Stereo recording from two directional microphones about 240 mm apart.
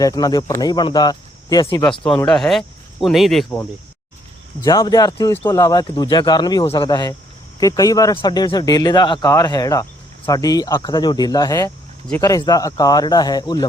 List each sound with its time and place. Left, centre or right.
0.0 s speech: centre
1.8 s speech: centre
4.6 s speech: centre